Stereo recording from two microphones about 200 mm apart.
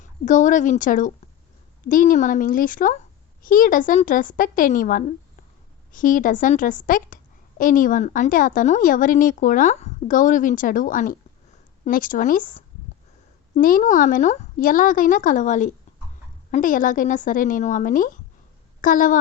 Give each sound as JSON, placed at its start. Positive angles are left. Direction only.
{"t": 0.0, "sound": "a woman's voice", "side_deg": 40}